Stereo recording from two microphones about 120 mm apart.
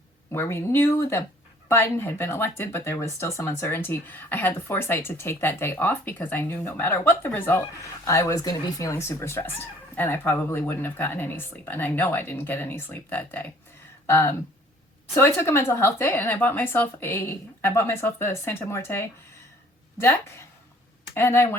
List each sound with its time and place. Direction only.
0.3 s speech: 20° left (ahead or behind)